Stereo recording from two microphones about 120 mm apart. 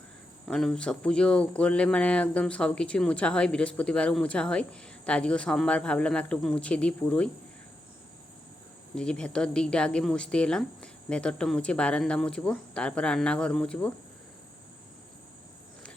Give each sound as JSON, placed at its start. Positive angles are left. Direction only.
{"t": 0.4, "sound": "speech", "side_deg": 5}
{"t": 9.0, "sound": "speech", "side_deg": 5}